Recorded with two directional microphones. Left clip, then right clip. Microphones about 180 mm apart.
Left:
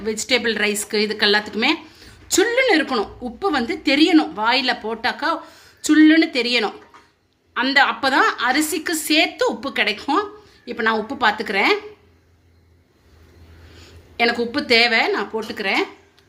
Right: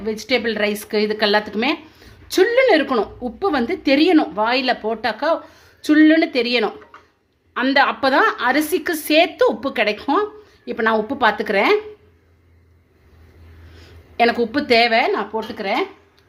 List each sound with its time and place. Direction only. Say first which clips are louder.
0.0 s a woman's voice: even; 20° right (ahead or behind)
14.2 s a woman's voice: right 2 dB; 35° right (ahead or behind); by 15.9 s 15° right (ahead or behind)